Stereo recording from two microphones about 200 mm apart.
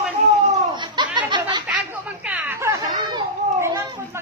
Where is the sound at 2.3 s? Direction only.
10° right (ahead or behind).